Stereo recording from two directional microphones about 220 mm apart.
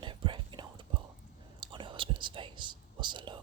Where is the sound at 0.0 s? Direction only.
20° right (ahead or behind).